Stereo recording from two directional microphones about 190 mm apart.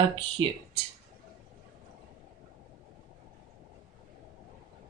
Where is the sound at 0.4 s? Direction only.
25° right (ahead or behind).